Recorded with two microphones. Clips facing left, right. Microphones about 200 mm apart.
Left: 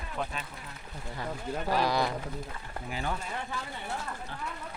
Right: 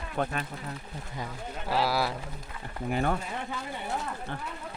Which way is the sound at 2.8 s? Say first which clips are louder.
Right 7 dB; 55° right (ahead or behind).